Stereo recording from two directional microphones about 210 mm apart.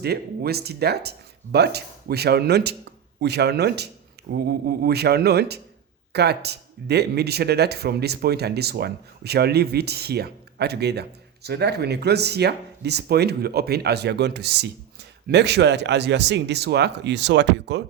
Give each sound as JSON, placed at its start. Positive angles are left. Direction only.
{"t": 0.0, "sound": "speech", "side_deg": -50}